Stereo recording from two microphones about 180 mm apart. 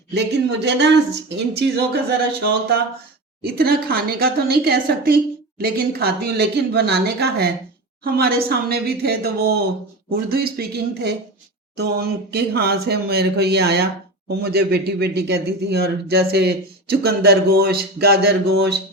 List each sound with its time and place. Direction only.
0.1 s speech: 70° right (ahead or behind)
1.5 s speech: 60° right (ahead or behind)